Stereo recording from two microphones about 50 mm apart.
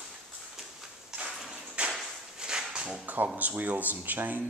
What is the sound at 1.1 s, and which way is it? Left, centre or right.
Ping, centre.